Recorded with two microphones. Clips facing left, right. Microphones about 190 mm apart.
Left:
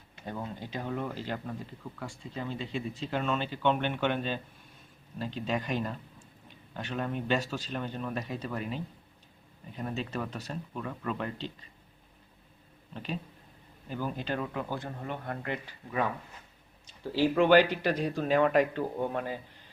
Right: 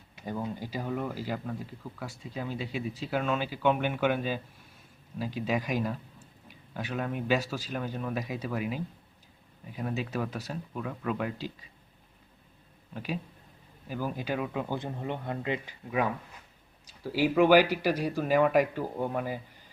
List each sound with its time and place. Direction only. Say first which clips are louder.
0.2 s speech: right 3 dB; 10° right (ahead or behind)
12.9 s speech: right 2 dB; 5° right (ahead or behind)